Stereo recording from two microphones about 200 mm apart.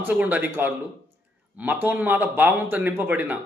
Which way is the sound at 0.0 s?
10° right (ahead or behind).